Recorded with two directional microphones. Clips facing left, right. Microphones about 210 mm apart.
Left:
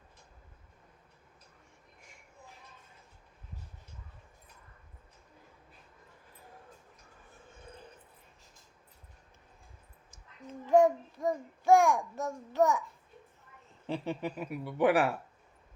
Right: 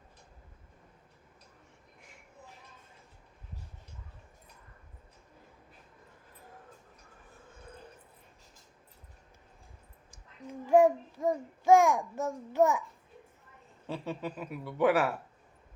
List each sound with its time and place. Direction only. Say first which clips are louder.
10.1 s child singing: right 2 dB; 15° right (ahead or behind)
13.8 s a woman's voice: left 2 dB; 15° left (ahead or behind)